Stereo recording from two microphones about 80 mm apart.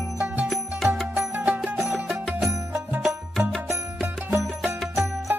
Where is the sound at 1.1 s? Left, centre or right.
Centre.